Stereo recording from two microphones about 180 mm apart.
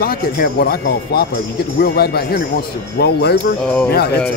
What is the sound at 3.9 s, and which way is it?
Speech, 60° left (ahead or behind).